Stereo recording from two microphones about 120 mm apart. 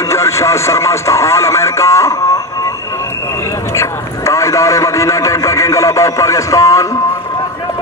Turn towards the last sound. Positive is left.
turn(degrees=25)  # may be behind; listen again after turning